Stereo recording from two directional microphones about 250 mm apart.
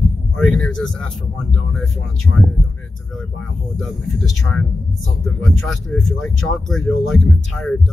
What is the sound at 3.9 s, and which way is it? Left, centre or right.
Speech, centre.